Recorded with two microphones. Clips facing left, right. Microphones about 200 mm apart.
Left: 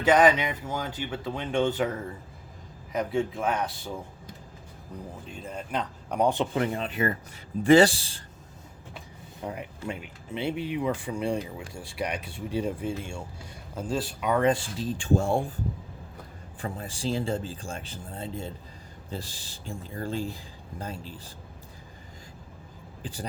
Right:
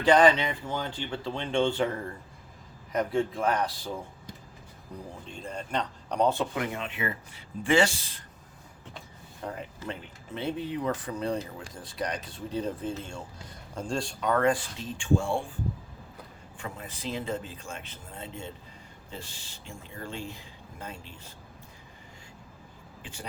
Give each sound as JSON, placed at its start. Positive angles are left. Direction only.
{"t": 0.6, "sound": "a man's voice", "side_deg": 5}
{"t": 5.3, "sound": "speech", "side_deg": 5}
{"t": 6.5, "sound": "speech", "side_deg": 35}
{"t": 9.4, "sound": "speech", "side_deg": 15}
{"t": 14.8, "sound": "speech", "side_deg": 35}
{"t": 16.6, "sound": "speech", "side_deg": 35}
{"t": 23.0, "sound": "speech", "side_deg": 35}